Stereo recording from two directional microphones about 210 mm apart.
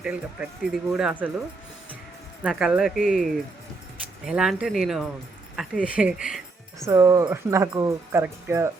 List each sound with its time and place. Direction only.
0.0 s speech: 5° right (ahead or behind)
2.4 s speech: 5° right (ahead or behind)
6.8 s speech: 15° right (ahead or behind)